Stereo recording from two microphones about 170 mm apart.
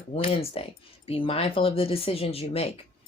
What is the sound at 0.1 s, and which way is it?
A woman's voice, 35° left (ahead or behind).